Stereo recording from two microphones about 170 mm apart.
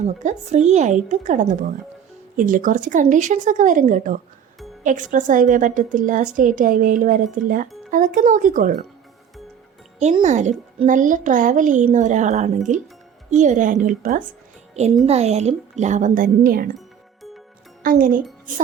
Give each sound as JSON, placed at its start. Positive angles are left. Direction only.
{"t": 0.0, "sound": "a woman's voice", "side_deg": -45}
{"t": 10.2, "sound": "a woman's voice", "side_deg": -45}
{"t": 15.0, "sound": "a woman's voice", "side_deg": -40}
{"t": 17.8, "sound": "speech", "side_deg": -55}